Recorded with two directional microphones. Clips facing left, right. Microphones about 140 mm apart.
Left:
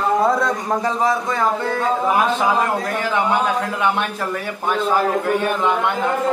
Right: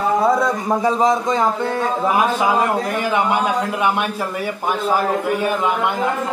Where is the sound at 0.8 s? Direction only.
20° right (ahead or behind).